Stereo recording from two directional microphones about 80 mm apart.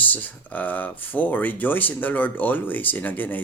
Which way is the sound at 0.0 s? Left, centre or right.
Left.